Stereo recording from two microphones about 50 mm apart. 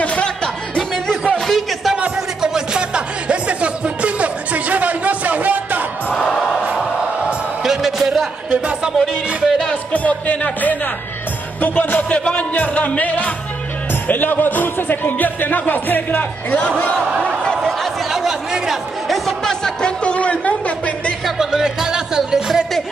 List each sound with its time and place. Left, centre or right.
0.0 s music: left
1.5 s a sound: centre
2.4 s music: centre; by 5.9 s right
7.6 s music: centre
9.9 s music: left
12.1 s speech: left
17.5 s a sound: centre
18.1 s chatter: centre
20.0 s a sound: left
21.4 s music: centre